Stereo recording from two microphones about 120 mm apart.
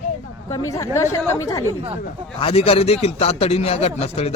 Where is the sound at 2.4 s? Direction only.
55° left (ahead or behind).